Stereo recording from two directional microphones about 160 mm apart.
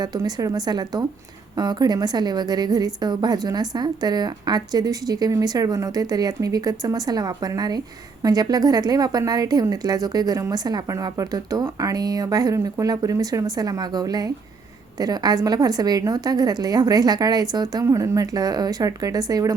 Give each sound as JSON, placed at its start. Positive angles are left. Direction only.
{"t": 0.0, "sound": "a woman's voice", "side_deg": -25}